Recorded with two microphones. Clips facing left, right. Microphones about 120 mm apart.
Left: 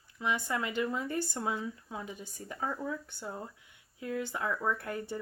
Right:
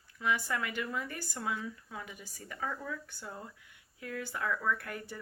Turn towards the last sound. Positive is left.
turn(degrees=25)  # may be behind; listen again after turning